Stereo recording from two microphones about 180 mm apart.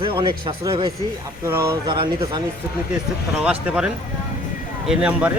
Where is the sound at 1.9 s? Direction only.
25° right (ahead or behind).